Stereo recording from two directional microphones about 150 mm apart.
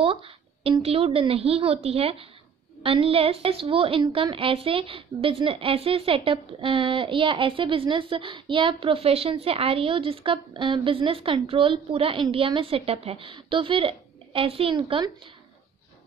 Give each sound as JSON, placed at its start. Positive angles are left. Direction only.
{"t": 0.0, "sound": "a woman's voice", "side_deg": -40}